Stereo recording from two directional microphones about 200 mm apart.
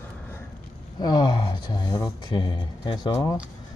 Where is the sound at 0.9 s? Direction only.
20° left (ahead or behind).